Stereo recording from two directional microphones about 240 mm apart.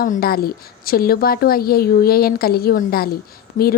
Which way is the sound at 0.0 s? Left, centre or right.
Left.